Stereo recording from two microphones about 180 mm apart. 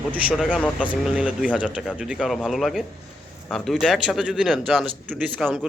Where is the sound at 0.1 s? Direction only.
5° right (ahead or behind).